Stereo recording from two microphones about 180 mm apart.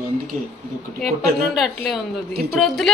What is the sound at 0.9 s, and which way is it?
Speech, centre (ahead or behind).